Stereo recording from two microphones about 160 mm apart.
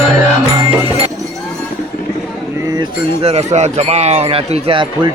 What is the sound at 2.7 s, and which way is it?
Speech, 40° right (ahead or behind).